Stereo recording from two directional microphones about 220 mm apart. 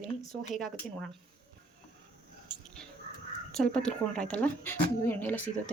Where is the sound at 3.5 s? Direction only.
5° left (ahead or behind).